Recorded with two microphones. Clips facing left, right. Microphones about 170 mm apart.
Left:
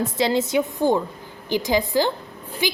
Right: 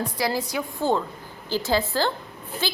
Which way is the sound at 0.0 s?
25° left (ahead or behind).